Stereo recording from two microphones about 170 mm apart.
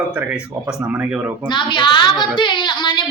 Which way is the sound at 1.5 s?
30° left (ahead or behind).